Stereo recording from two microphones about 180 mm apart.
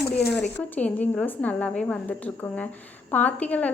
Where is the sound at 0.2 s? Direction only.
65° left (ahead or behind).